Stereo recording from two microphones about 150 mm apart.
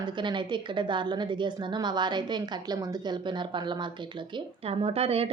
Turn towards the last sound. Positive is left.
turn(degrees=-40)  # may be behind; listen again after turning